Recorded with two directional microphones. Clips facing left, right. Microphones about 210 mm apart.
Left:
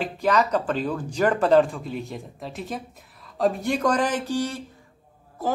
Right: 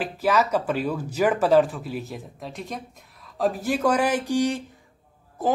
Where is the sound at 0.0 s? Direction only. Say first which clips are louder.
Even; 5° right (ahead or behind).